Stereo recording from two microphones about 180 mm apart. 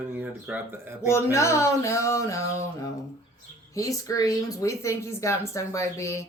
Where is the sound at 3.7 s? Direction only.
20° left (ahead or behind).